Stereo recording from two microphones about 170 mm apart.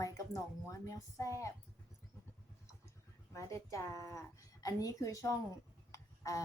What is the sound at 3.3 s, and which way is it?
A woman's voice, 20° left (ahead or behind).